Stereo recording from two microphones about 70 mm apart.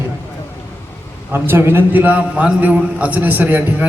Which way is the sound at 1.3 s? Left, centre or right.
Right.